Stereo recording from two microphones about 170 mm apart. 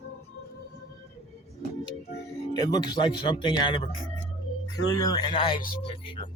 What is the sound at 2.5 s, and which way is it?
Speech, 20° left (ahead or behind).